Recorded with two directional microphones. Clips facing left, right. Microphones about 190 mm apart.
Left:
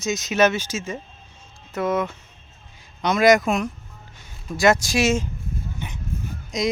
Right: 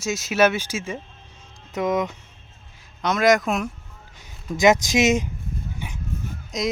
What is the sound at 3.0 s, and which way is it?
Speech, centre (ahead or behind).